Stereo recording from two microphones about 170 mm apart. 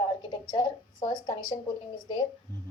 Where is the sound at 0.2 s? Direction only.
30° left (ahead or behind).